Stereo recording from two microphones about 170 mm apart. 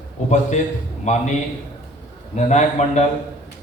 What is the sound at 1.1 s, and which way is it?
Speech, 40° left (ahead or behind).